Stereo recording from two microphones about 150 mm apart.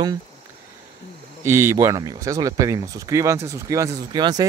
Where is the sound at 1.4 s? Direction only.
15° right (ahead or behind).